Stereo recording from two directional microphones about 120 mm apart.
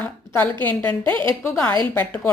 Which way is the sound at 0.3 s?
15° left (ahead or behind).